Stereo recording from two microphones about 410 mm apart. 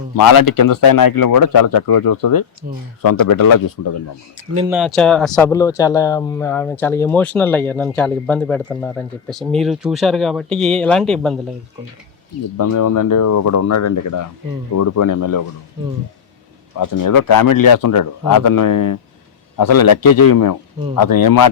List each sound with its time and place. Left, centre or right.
0.2 s speech: left
4.5 s speech: centre
12.5 s speech: left
16.7 s a man's voice: left